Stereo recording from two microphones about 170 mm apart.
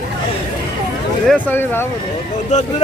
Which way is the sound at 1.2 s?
10° left (ahead or behind).